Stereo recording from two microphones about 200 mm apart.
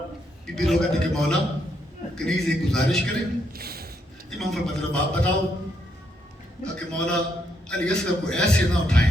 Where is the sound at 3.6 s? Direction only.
50° right (ahead or behind).